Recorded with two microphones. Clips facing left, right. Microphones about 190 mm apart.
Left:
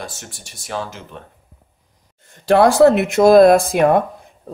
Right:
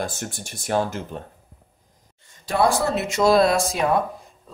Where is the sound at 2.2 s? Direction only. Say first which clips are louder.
Left 8 dB; 60° left (ahead or behind).